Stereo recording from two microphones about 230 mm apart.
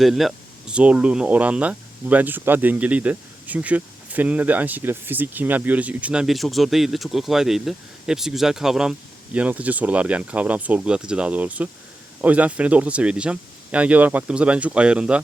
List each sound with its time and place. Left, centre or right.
0.0 s speech: centre